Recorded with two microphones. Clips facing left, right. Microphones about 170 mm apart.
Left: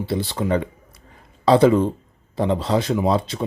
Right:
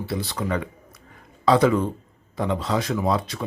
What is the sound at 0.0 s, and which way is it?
Speech, 25° left (ahead or behind).